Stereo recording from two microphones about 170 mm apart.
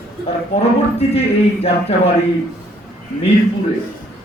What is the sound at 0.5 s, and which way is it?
A man's voice, 35° left (ahead or behind).